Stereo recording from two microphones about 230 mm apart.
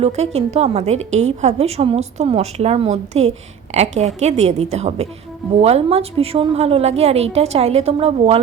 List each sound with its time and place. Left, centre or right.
0.0 s a woman's voice: right